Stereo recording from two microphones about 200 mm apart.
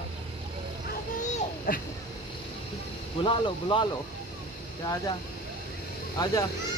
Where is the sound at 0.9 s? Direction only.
40° left (ahead or behind).